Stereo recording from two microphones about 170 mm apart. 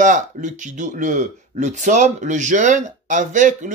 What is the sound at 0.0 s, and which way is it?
Speech, 45° right (ahead or behind).